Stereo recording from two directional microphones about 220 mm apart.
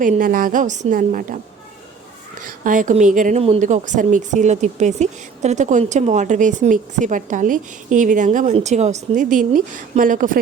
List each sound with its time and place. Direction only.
0.0 s a woman's voice: 40° right (ahead or behind)
2.4 s a woman's voice: 35° right (ahead or behind)